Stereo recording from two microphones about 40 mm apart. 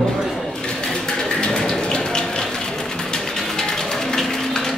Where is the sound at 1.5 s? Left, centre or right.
Left.